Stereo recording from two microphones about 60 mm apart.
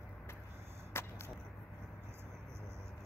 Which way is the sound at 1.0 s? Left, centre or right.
Left.